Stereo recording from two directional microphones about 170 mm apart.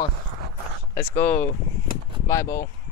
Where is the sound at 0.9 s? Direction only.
15° left (ahead or behind).